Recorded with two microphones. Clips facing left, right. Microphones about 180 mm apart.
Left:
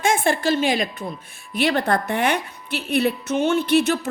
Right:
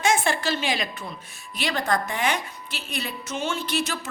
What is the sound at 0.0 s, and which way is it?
A woman's voice, 50° left (ahead or behind).